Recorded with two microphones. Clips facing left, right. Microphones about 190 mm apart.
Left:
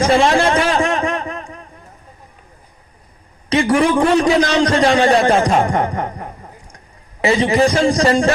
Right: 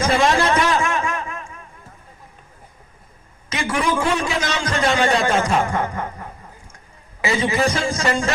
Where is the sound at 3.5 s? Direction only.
30° left (ahead or behind).